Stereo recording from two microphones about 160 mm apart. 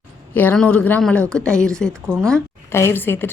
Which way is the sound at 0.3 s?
10° left (ahead or behind).